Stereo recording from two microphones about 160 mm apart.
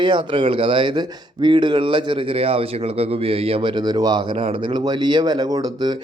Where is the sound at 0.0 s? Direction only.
30° right (ahead or behind).